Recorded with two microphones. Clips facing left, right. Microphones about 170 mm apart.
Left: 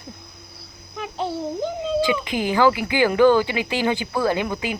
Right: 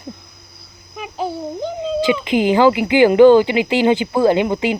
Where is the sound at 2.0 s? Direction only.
20° right (ahead or behind).